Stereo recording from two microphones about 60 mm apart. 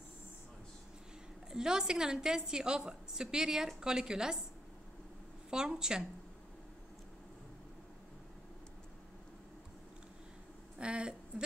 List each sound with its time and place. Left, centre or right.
1.5 s a woman's voice: centre
5.5 s a woman's voice: centre
10.8 s a sound: centre